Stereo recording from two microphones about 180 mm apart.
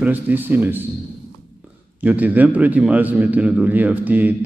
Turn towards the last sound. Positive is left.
turn(degrees=-10)  # may be behind; listen again after turning